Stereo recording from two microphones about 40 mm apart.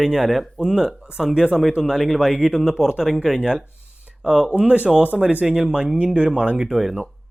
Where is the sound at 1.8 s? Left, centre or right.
Centre.